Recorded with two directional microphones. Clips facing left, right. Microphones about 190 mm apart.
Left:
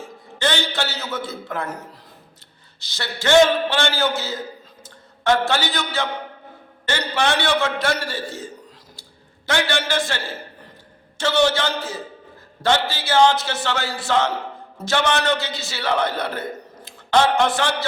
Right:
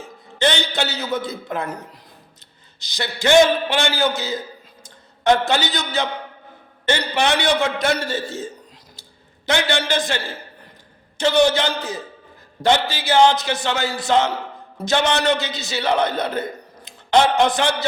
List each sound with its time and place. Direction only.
0.3 s a man's voice: 20° right (ahead or behind)
9.5 s a man's voice: 20° right (ahead or behind)
11.2 s a man's voice: 15° right (ahead or behind)